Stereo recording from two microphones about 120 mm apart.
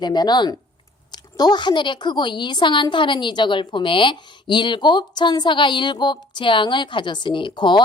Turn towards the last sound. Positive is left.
turn(degrees=40)  # may be behind; listen again after turning